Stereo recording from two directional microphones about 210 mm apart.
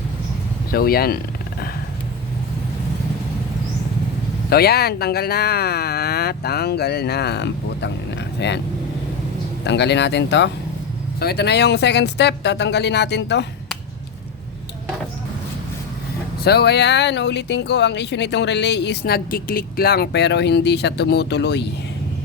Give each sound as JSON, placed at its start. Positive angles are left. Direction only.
{"t": 0.7, "sound": "speech", "side_deg": 45}
{"t": 4.4, "sound": "speech", "side_deg": 50}
{"t": 9.6, "sound": "speech", "side_deg": 55}
{"t": 16.4, "sound": "speech", "side_deg": 50}